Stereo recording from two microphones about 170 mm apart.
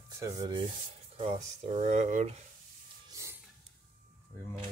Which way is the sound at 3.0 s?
15° right (ahead or behind).